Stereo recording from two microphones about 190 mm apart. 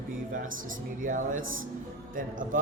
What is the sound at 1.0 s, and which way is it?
Speech, 45° right (ahead or behind).